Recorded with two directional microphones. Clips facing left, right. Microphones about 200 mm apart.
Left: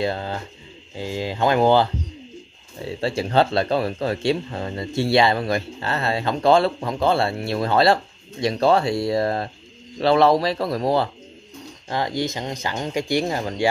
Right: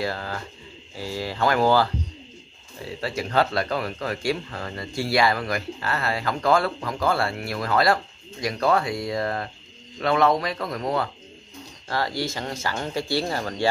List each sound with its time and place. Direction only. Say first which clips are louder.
0.0 s speech: left 4 dB; 25° left (ahead or behind)
11.9 s speech: left 3 dB; 20° left (ahead or behind)